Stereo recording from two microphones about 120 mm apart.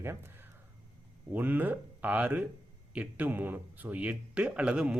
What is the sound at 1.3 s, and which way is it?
A man's voice, 15° right (ahead or behind).